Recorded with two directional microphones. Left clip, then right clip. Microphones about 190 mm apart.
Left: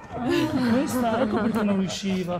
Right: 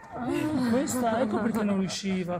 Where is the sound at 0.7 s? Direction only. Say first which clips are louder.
Left 1 dB; 25° right (ahead or behind).